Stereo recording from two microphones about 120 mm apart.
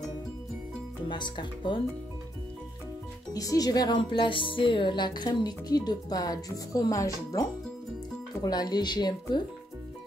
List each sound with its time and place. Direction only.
1.0 s speech: 40° left (ahead or behind)
3.3 s speech: 30° left (ahead or behind)